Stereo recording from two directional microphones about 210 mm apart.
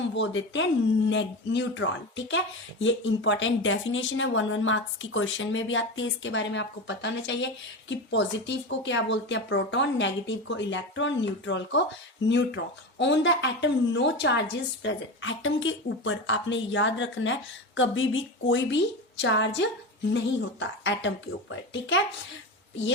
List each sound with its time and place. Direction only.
0.0 s speech: 60° left (ahead or behind)